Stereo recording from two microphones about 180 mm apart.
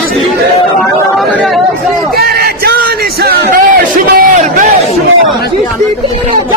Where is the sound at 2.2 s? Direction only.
60° right (ahead or behind).